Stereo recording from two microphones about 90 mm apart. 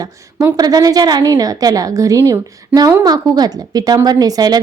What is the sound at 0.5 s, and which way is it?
A woman's voice, 45° right (ahead or behind).